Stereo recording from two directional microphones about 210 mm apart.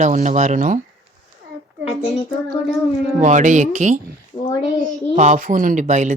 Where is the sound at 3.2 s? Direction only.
35° right (ahead or behind).